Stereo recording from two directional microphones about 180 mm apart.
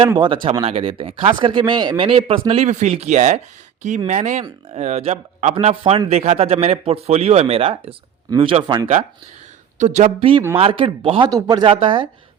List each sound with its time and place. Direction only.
0.6 s a man's voice: 30° right (ahead or behind)
9.7 s a man's voice: 40° right (ahead or behind)